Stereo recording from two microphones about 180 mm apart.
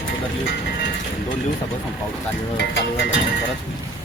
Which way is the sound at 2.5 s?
80° left.